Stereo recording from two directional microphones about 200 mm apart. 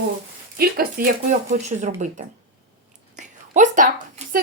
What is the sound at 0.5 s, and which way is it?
Speech, 45° right (ahead or behind).